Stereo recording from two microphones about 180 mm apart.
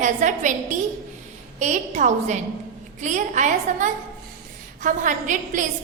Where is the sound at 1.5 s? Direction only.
40° right (ahead or behind).